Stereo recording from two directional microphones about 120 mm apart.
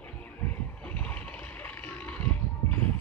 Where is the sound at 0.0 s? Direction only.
10° left (ahead or behind).